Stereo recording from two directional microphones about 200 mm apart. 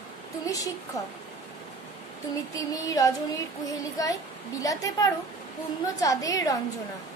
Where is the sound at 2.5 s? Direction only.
15° left (ahead or behind).